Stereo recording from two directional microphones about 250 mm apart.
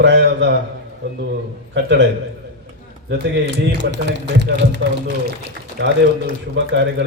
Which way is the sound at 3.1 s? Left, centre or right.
Right.